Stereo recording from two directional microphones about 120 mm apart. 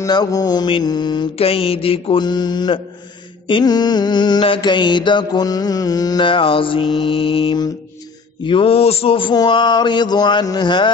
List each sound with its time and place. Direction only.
0.0 s mantra: 30° left (ahead or behind)
1.4 s speech: 50° left (ahead or behind)
2.2 s mantra: 35° left (ahead or behind)
8.5 s speech: 50° left (ahead or behind)
9.4 s mantra: 40° left (ahead or behind)